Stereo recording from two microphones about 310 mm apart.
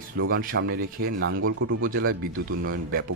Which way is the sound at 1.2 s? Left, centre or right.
Right.